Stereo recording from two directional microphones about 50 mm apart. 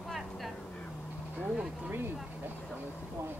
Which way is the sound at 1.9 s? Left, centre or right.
Right.